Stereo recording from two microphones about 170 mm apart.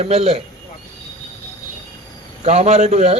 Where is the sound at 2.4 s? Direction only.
40° right (ahead or behind).